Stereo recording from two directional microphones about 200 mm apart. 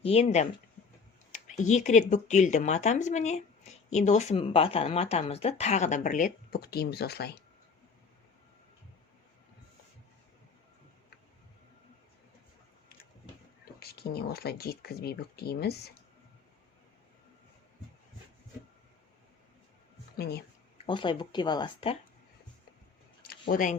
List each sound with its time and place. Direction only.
0.0 s speech: 30° left (ahead or behind); by 7.3 s 55° left (ahead or behind)
13.7 s speech: 50° left (ahead or behind)
20.1 s speech: 55° left (ahead or behind)
20.8 s speech: 25° left (ahead or behind)
23.3 s speech: 45° left (ahead or behind)